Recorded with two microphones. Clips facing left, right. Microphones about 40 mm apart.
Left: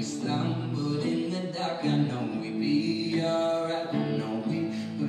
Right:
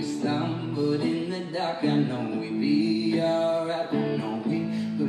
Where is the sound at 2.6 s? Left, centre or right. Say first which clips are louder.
Right 4 dB; centre.